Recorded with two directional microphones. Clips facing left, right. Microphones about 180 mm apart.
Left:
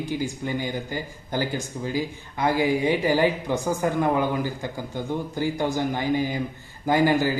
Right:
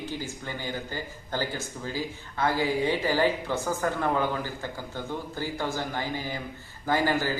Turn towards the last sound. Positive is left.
turn(degrees=15)  # may be behind; listen again after turning